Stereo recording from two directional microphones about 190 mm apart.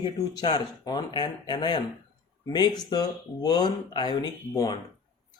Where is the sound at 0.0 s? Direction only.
20° left (ahead or behind).